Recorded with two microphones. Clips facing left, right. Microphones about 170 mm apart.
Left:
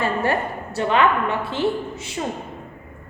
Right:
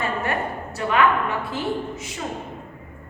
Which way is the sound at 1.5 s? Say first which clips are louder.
Left 3 dB; 30° left (ahead or behind).